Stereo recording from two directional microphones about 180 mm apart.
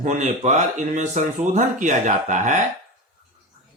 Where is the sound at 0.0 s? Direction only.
40° right (ahead or behind).